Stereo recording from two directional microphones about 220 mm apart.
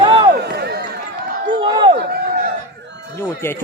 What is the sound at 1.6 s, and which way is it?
Speech, 20° right (ahead or behind).